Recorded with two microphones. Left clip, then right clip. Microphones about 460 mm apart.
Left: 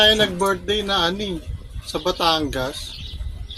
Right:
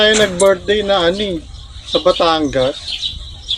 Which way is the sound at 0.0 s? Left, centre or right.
Left.